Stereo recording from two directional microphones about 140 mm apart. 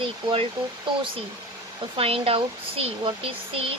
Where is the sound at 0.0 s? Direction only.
40° right (ahead or behind).